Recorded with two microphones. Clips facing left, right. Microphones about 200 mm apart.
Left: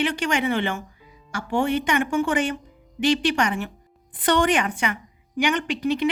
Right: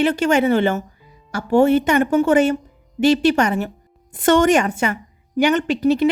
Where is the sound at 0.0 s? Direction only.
40° right (ahead or behind).